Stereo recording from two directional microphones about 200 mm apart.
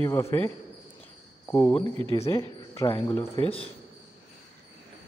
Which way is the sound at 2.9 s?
30° left (ahead or behind).